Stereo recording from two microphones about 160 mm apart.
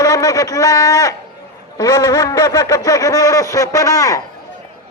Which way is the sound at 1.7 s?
25° left (ahead or behind).